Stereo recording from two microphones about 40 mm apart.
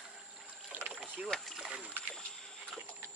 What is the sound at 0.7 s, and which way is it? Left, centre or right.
Boat, right.